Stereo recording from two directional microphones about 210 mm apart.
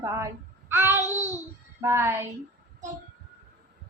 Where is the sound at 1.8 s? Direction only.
10° right (ahead or behind).